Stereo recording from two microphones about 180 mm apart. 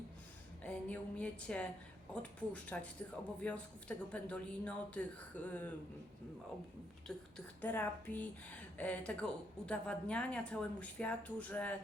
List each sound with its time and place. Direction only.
0.6 s a woman's voice: 5° left (ahead or behind)
7.3 s a woman's voice: 10° left (ahead or behind)